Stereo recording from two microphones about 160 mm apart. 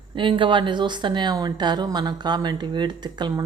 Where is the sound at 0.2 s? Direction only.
30° right (ahead or behind).